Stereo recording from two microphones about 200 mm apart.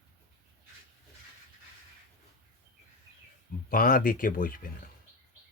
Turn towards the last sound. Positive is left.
turn(degrees=45)  # may be behind; listen again after turning